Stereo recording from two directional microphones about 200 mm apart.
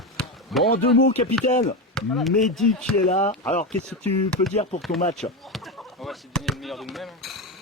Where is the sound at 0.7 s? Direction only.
60° left (ahead or behind).